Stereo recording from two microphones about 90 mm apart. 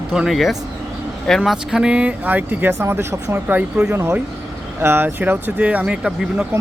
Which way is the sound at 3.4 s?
15° right (ahead or behind).